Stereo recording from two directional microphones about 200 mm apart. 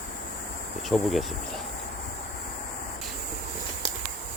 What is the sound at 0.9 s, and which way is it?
Speech, centre (ahead or behind).